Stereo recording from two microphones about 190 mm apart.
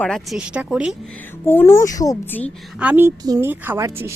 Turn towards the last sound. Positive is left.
turn(degrees=-15)  # may be behind; listen again after turning